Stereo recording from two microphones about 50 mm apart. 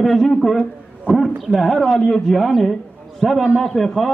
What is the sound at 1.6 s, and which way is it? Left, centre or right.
A man's voice, centre.